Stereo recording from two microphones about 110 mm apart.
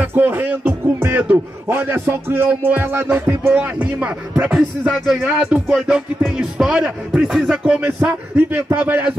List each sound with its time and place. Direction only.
0.0 s music: 20° right (ahead or behind)